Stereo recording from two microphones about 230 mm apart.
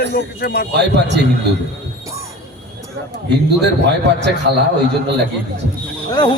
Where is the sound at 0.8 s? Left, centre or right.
Right.